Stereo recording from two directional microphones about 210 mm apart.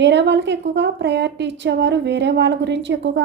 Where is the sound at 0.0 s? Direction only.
60° right (ahead or behind).